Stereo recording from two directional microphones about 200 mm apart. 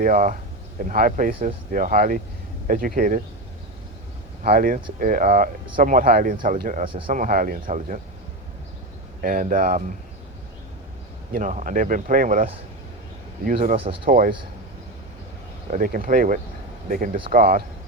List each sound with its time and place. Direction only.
0.0 s speech: 40° right (ahead or behind)
4.4 s speech: 45° right (ahead or behind)
6.8 s speech: 25° right (ahead or behind)
7.1 s speech: 40° right (ahead or behind)
9.2 s speech: 40° right (ahead or behind)
11.3 s speech: 40° right (ahead or behind)
13.7 s speech: 25° right (ahead or behind)
14.1 s speech: 45° right (ahead or behind)
15.7 s speech: 45° right (ahead or behind)